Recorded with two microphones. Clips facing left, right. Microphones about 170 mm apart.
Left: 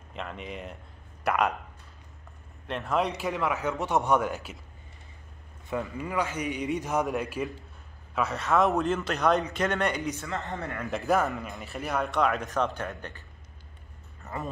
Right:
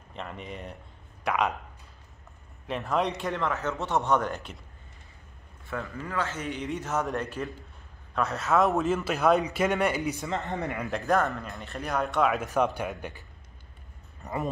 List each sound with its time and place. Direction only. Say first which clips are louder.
0.1 s a man's voice: left 1 dB; centre (ahead or behind)
2.6 s a man's voice: even; centre (ahead or behind)
5.7 s a man's voice: left 3 dB; 15° left (ahead or behind); by 10.2 s 5° right (ahead or behind)
10.2 s speech: right 3 dB; 20° right (ahead or behind)
10.9 s a man's voice: left 1 dB; 5° left (ahead or behind)
14.2 s speech: right 4 dB; 15° right (ahead or behind)